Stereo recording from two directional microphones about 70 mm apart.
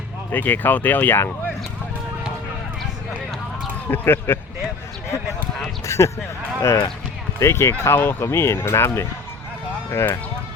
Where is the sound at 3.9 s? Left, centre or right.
Left.